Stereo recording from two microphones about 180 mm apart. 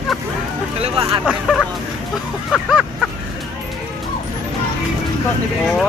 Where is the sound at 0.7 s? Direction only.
35° right (ahead or behind).